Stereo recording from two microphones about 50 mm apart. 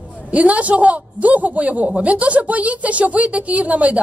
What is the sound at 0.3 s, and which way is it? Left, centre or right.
A woman's voice, right.